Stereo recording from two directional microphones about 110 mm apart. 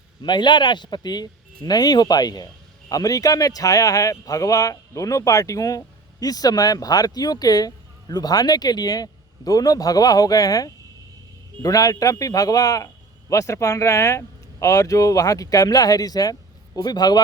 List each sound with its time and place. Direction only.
0.2 s speech: 45° left (ahead or behind)